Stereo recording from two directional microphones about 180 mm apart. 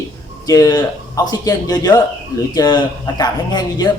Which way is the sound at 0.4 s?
20° left (ahead or behind).